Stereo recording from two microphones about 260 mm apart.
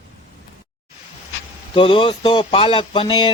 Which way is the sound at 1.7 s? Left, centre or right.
Centre.